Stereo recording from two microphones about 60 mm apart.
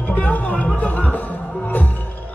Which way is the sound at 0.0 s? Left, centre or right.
Left.